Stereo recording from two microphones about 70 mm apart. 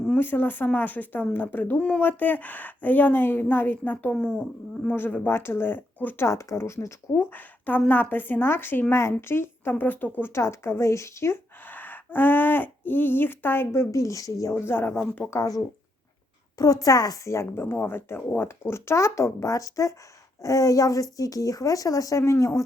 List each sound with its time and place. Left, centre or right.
0.2 s speech: left
4.9 s a woman's voice: left
6.2 s a woman's voice: left
11.6 s speech: left
13.7 s speech: left
14.5 s a woman's voice: left
14.9 s speech: left
15.3 s speech: left
17.3 s a woman's voice: left
22.2 s speech: left